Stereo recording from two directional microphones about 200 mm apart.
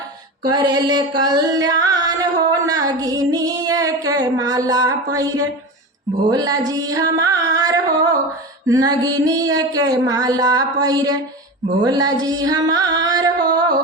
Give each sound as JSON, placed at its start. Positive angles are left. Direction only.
{"t": 0.4, "sound": "music", "side_deg": -20}